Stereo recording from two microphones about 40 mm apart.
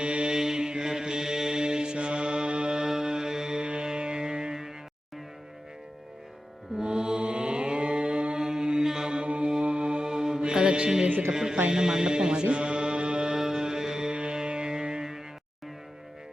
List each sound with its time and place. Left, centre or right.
0.0 s mantra: right
2.8 s music: centre
6.7 s mantra: centre
9.2 s music: right
13.3 s music: centre